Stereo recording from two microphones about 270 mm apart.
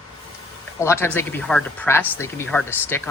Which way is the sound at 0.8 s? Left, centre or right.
Centre.